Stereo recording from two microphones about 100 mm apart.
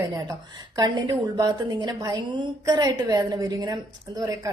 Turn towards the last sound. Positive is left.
turn(degrees=-35)  # may be behind; listen again after turning